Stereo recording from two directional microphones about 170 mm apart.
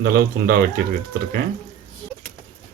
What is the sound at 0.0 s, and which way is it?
Speech, 60° right (ahead or behind).